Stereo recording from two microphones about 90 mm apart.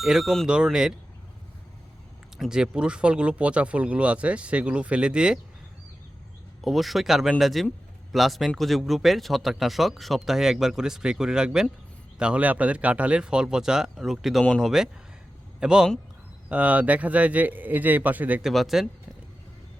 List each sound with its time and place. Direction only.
0.0 s speech: 5° right (ahead or behind)
2.4 s speech: 10° right (ahead or behind)
6.7 s speech: centre (ahead or behind); by 18.4 s 20° right (ahead or behind)
18.4 s speech: 5° right (ahead or behind)